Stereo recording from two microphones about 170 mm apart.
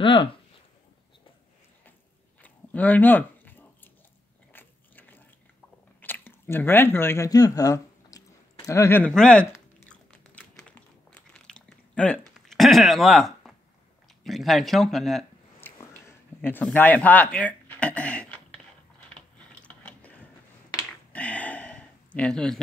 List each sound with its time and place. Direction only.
0.0 s speech: 30° left (ahead or behind)
2.4 s chewing: 10° left (ahead or behind)
4.5 s biting: 10° left (ahead or behind)
5.9 s speech: 10° left (ahead or behind)
9.8 s biting: 5° left (ahead or behind)
14.2 s speech: centre (ahead or behind)
15.6 s a sound: 15° left (ahead or behind)
19.1 s mechanisms: 5° left (ahead or behind)
21.1 s a sound: 10° left (ahead or behind)